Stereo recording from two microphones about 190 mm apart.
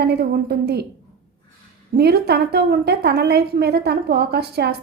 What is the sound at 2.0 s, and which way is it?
A woman's voice, 55° right (ahead or behind).